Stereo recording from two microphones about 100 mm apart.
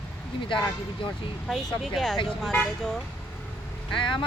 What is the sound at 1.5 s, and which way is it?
Speech, centre (ahead or behind).